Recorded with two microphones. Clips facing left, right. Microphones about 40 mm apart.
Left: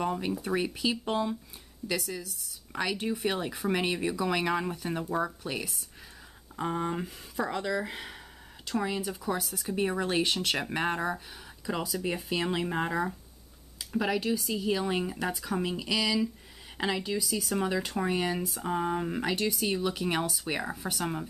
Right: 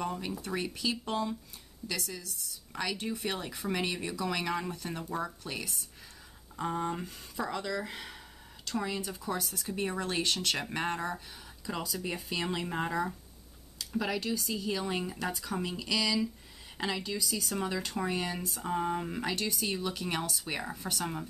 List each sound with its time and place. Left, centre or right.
0.0 s speech: centre